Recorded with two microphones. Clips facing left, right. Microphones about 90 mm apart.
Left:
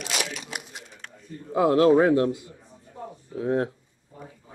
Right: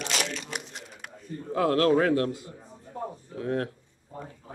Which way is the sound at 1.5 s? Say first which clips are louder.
Left 4 dB; 20° left (ahead or behind).